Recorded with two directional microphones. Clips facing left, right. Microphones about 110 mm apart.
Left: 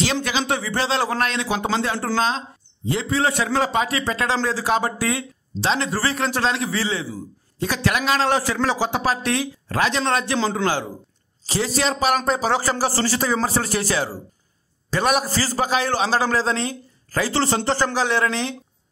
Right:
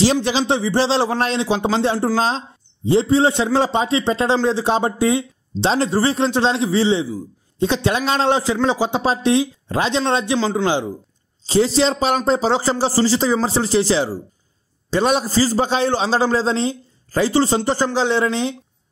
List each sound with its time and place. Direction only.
0.0 s a man's voice: 35° right (ahead or behind)